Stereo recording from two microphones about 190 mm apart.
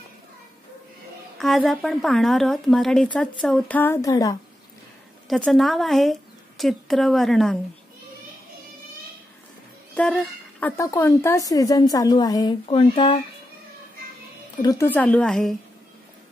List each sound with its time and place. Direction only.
1.4 s speech: centre (ahead or behind); by 4.4 s 20° left (ahead or behind)
5.3 s speech: centre (ahead or behind)
9.9 s a woman's voice: 5° left (ahead or behind); by 13.2 s 30° left (ahead or behind)
14.6 s a woman's voice: 20° left (ahead or behind)
14.9 s speech: 5° left (ahead or behind)